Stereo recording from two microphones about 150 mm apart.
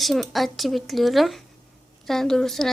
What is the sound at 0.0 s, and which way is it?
Speech, centre (ahead or behind).